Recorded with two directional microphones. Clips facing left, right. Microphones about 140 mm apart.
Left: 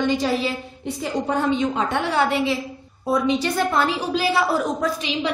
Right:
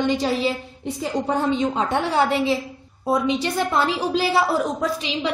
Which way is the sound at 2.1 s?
35° right (ahead or behind).